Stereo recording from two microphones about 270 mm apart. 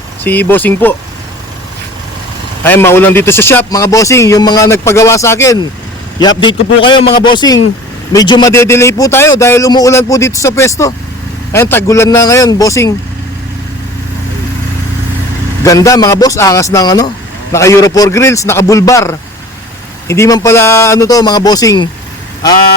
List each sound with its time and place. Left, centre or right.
0.3 s a man's voice: centre
2.6 s a man's voice: centre
15.6 s a man's voice: centre